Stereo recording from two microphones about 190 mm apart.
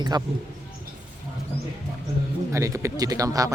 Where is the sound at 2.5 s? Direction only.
15° right (ahead or behind).